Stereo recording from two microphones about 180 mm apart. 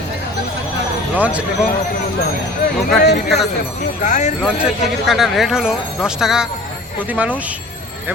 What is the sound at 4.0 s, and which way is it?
Speech, 40° left (ahead or behind).